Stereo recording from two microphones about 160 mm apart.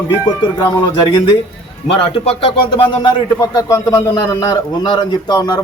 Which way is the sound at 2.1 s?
35° left (ahead or behind).